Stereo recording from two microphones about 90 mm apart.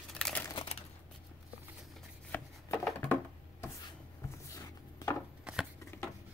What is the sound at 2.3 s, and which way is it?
Chopping, 25° left (ahead or behind).